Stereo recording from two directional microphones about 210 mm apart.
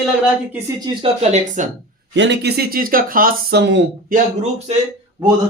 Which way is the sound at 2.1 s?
60° right (ahead or behind).